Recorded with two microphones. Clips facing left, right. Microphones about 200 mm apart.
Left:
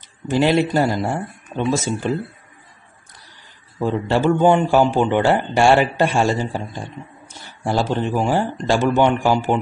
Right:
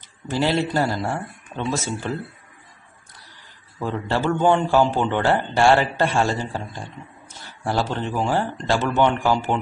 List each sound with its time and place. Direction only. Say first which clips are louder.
0.3 s a man's voice: left 5 dB; 15° left (ahead or behind)
3.7 s a man's voice: left 5 dB; 20° left (ahead or behind)